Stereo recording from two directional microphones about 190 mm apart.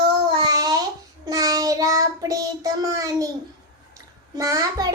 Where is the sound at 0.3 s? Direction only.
20° right (ahead or behind).